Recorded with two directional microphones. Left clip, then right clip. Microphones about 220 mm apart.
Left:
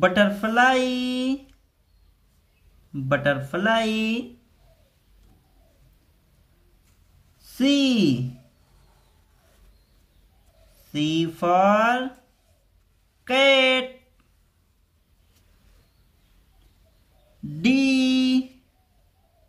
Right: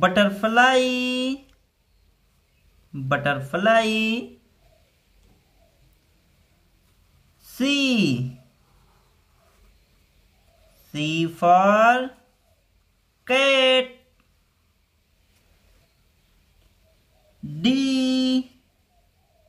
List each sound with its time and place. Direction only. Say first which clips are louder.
0.0 s speech: right 1 dB; 20° right (ahead or behind)
2.9 s speech: left 1 dB; 15° right (ahead or behind)
7.4 s speech: left 1 dB; 20° right (ahead or behind)
10.9 s speech: left 1 dB; 20° right (ahead or behind)
13.2 s speech: even; 20° right (ahead or behind)
17.6 s a sound: left 2 dB; 20° right (ahead or behind)